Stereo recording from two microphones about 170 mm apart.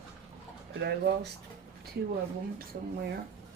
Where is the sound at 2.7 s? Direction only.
60° right (ahead or behind).